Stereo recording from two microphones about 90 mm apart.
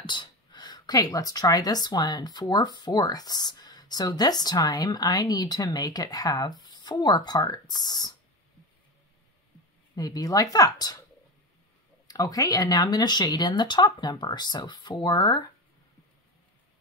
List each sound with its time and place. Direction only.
0.0 s speech: 60° left (ahead or behind)
9.9 s speech: 45° left (ahead or behind)
12.1 s speech: 40° left (ahead or behind)